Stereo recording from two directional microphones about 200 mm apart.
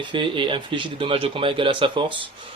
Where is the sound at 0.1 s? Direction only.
25° right (ahead or behind).